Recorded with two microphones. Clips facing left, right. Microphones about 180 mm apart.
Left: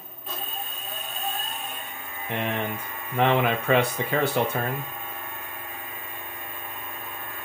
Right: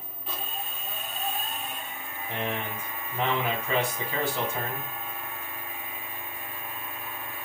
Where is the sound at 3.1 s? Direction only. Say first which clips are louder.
Left 7 dB; 70° left (ahead or behind).